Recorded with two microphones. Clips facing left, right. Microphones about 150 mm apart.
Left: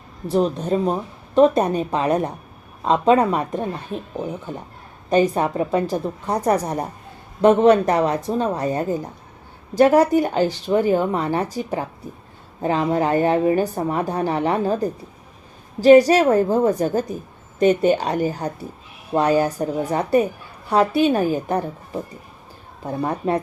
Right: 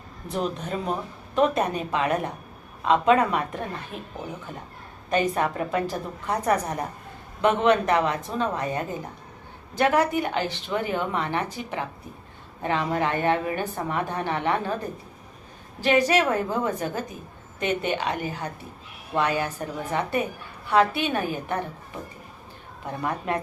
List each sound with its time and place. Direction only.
0.3 s speech: 35° left (ahead or behind)
5.1 s speech: 35° left (ahead or behind)
15.8 s speech: 35° left (ahead or behind)
22.9 s speech: 30° left (ahead or behind)